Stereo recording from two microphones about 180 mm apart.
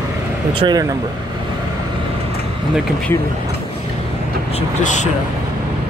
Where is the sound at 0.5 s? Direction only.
20° right (ahead or behind).